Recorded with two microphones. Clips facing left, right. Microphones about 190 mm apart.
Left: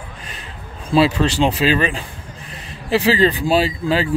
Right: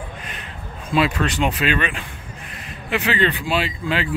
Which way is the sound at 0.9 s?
30° left (ahead or behind).